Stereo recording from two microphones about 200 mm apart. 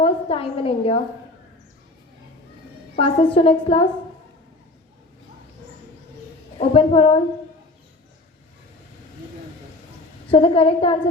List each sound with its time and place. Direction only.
0.0 s a woman's voice: 30° left (ahead or behind)
2.9 s a woman's voice: 25° left (ahead or behind)
6.6 s a woman's voice: 30° left (ahead or behind)
10.3 s a woman's voice: 30° left (ahead or behind)